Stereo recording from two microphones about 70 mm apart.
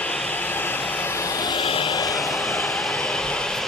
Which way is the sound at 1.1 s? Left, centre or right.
Left.